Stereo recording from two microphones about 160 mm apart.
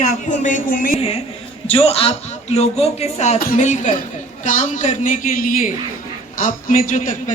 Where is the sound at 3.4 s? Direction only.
55° left (ahead or behind).